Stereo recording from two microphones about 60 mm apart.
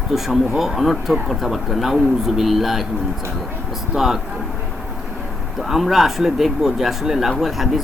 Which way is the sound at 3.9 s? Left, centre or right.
Centre.